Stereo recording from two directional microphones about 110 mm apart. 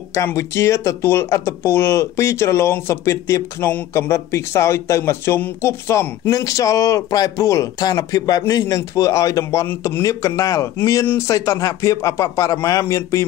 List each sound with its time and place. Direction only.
0.1 s speech: 25° left (ahead or behind)